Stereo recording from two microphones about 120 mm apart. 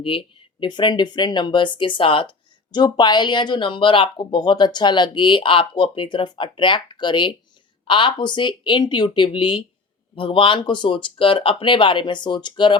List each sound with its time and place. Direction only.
0.0 s speech: 50° left (ahead or behind)